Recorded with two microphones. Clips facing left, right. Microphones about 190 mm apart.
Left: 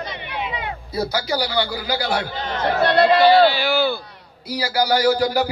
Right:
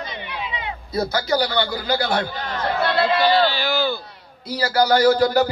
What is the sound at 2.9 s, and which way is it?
Speech, 60° left (ahead or behind).